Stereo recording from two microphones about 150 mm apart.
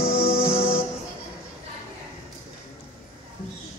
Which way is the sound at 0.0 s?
40° left (ahead or behind).